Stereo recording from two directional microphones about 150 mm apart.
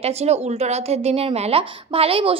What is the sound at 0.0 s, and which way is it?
Speech, 45° right (ahead or behind).